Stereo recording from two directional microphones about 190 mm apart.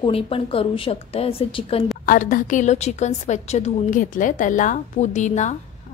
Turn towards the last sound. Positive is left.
turn(degrees=40)  # may be behind; listen again after turning